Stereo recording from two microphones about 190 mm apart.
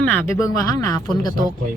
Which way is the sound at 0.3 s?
15° left (ahead or behind).